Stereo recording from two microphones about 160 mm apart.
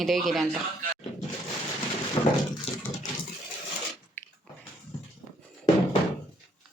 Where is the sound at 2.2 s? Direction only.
25° left (ahead or behind).